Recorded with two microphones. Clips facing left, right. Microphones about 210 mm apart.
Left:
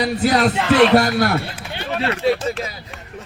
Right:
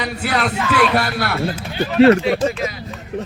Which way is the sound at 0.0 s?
35° left (ahead or behind).